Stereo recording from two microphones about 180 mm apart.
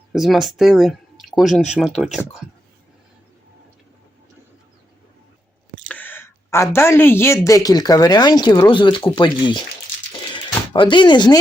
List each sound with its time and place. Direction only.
0.1 s speech: centre (ahead or behind)
5.7 s a woman's voice: 10° left (ahead or behind); by 9.6 s 25° left (ahead or behind)
10.1 s a sound: 25° left (ahead or behind)